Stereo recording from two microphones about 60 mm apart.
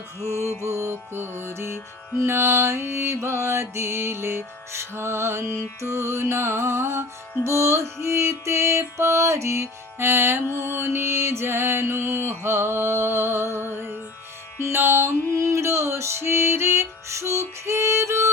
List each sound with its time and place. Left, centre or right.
0.7 s music: right
14.7 s music: right
15.4 s music: right